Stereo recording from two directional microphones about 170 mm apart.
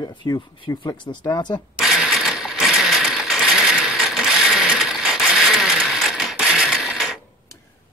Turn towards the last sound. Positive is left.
turn(degrees=-5)  # may be behind; listen again after turning